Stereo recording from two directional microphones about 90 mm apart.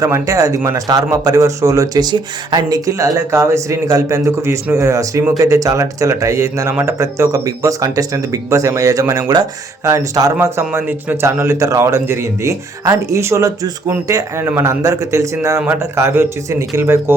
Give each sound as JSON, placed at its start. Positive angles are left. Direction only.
{"t": 0.0, "sound": "speech", "side_deg": -40}
{"t": 10.8, "sound": "speech", "side_deg": -25}
{"t": 15.6, "sound": "speech", "side_deg": -25}